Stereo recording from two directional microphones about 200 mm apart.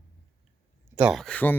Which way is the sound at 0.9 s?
5° right (ahead or behind).